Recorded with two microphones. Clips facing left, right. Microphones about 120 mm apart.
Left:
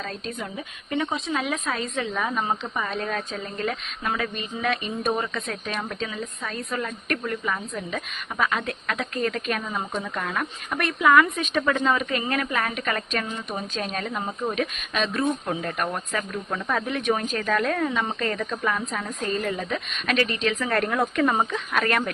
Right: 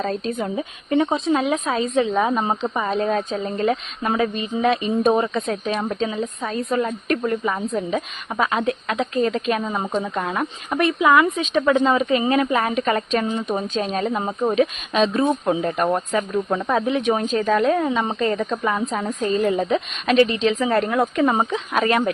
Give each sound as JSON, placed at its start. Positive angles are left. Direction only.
{"t": 0.0, "sound": "a woman's voice", "side_deg": -30}
{"t": 20.6, "sound": "a woman's voice", "side_deg": -15}